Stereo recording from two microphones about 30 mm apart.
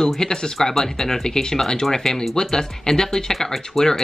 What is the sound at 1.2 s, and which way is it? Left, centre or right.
Speech, left.